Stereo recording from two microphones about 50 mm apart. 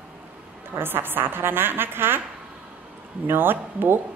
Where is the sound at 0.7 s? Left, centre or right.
Right.